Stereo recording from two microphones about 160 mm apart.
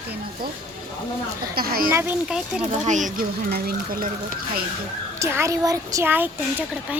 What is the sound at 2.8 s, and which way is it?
Speech, 50° right (ahead or behind).